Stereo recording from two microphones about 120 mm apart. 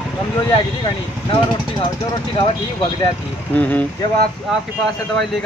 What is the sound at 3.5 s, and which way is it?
Speech, 10° left (ahead or behind).